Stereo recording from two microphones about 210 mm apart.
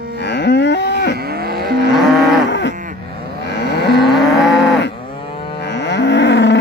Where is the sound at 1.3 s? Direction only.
50° right (ahead or behind).